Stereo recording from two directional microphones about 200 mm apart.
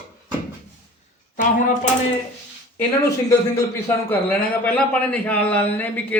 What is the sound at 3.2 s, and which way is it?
A man's voice, 15° left (ahead or behind).